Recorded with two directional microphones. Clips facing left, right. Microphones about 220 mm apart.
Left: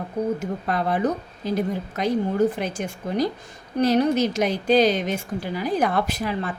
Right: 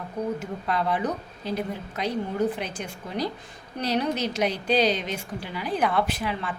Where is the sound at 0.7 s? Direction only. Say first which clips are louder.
Left 3 dB; 45° left (ahead or behind).